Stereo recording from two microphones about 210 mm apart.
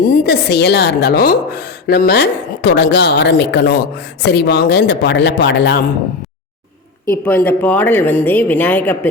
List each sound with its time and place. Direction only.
0.0 s a woman's voice: 50° left (ahead or behind)
7.3 s speech: 10° left (ahead or behind)